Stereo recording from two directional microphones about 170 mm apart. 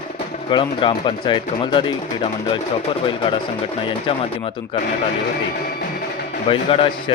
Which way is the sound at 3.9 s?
30° left (ahead or behind).